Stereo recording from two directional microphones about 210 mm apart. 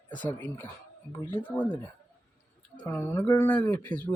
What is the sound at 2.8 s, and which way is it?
Speech, 10° left (ahead or behind).